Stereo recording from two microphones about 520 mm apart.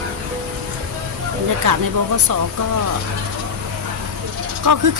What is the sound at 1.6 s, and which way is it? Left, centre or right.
Speech, right.